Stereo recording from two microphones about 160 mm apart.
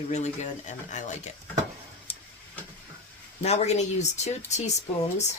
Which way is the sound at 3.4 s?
40° left (ahead or behind).